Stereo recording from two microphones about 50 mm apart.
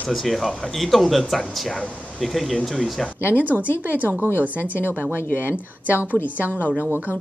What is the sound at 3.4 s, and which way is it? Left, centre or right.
A woman's voice, right.